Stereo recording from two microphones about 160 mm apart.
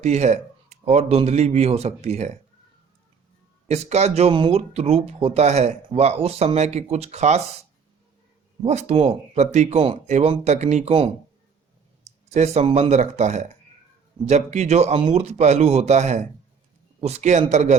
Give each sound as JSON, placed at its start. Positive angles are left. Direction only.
{"t": 0.0, "sound": "speech", "side_deg": -45}
{"t": 3.7, "sound": "speech", "side_deg": -45}
{"t": 8.6, "sound": "speech", "side_deg": -40}
{"t": 12.3, "sound": "speech", "side_deg": -45}